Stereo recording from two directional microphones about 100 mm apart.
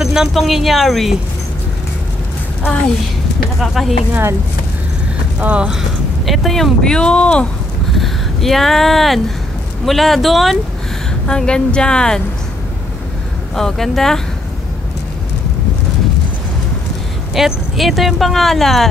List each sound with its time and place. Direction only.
0.0 s speech: 5° right (ahead or behind)
4.1 s speech: 25° right (ahead or behind)
5.4 s speech: 10° right (ahead or behind); by 7.4 s 10° left (ahead or behind)
7.9 s vehicle: centre (ahead or behind)
9.8 s a woman's voice: centre (ahead or behind)
13.6 s speech: 5° left (ahead or behind)
17.3 s speech: centre (ahead or behind)